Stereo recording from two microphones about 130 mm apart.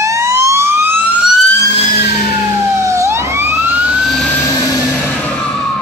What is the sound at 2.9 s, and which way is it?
Emergency vehicle, 20° right (ahead or behind).